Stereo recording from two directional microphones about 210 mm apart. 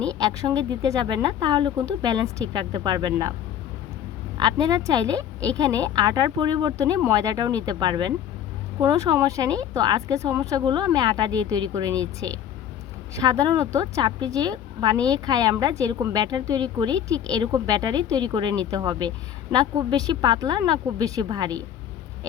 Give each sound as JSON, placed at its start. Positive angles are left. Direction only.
{"t": 0.2, "sound": "a woman's voice", "side_deg": -20}
{"t": 4.4, "sound": "a woman's voice", "side_deg": -20}